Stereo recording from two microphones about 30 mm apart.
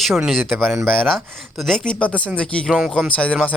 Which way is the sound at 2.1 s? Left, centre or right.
Left.